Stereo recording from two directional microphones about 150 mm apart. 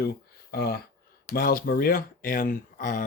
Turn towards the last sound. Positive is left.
turn(degrees=65)  # may be behind; listen again after turning